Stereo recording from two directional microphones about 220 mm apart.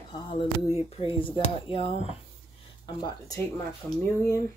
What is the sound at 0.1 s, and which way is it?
Speech, 20° left (ahead or behind).